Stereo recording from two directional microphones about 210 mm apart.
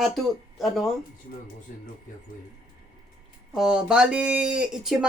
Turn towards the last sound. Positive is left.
turn(degrees=0)  # may be behind; listen again after turning